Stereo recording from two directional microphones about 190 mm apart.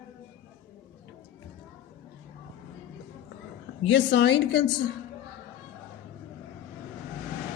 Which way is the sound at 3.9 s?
65° left (ahead or behind).